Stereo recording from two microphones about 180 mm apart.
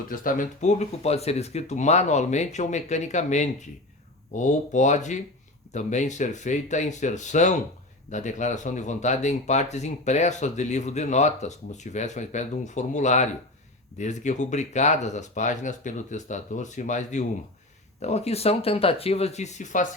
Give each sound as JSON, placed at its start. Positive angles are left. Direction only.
{"t": 0.1, "sound": "speech", "side_deg": 50}